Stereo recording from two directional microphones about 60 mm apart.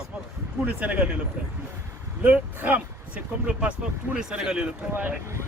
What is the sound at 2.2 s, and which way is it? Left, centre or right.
Speech, right.